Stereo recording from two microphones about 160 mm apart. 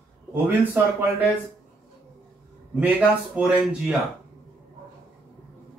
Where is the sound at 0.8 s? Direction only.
10° right (ahead or behind).